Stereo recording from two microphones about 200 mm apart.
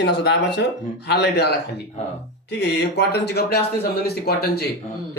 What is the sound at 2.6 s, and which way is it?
Speech, 55° left (ahead or behind).